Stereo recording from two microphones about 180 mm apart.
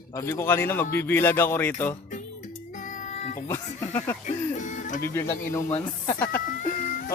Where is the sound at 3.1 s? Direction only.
40° left (ahead or behind).